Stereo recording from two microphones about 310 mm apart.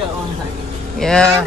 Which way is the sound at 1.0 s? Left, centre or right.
Centre.